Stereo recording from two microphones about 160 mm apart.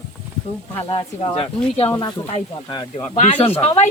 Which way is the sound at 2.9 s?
45° left (ahead or behind).